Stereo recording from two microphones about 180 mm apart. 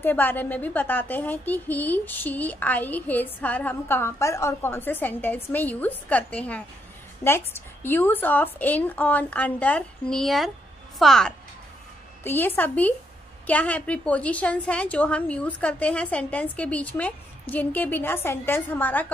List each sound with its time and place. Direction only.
0.0 s a woman's voice: 10° left (ahead or behind)